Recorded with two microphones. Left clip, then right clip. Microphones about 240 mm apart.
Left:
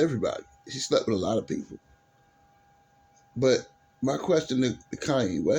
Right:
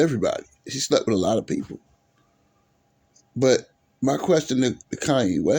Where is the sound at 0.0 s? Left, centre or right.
Right.